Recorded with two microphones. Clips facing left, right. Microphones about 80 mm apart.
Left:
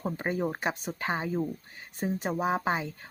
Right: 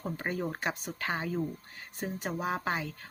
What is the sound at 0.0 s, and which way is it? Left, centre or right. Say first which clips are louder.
Speech: left 4 dB; left.